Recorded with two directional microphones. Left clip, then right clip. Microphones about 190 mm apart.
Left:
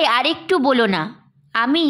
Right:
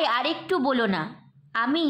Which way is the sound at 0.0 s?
25° left (ahead or behind).